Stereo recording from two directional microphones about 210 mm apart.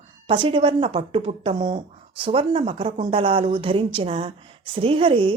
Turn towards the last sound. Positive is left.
turn(degrees=-25)  # may be behind; listen again after turning